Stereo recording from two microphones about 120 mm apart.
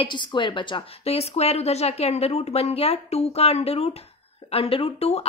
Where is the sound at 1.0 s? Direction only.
60° left (ahead or behind).